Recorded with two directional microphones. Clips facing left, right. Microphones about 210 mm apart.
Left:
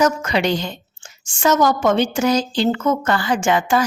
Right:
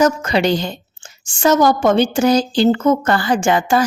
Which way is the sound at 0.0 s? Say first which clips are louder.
Right 3 dB; 30° right (ahead or behind).